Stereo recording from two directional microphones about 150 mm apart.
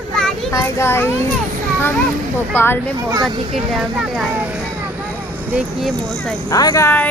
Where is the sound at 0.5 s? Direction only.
20° left (ahead or behind).